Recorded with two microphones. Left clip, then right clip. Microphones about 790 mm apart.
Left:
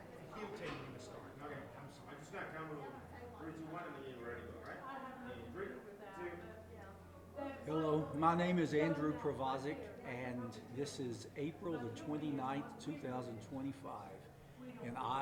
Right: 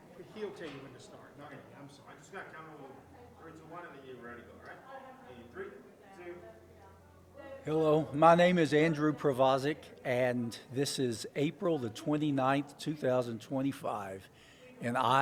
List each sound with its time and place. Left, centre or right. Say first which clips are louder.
7.7 s speech: right 9 dB; right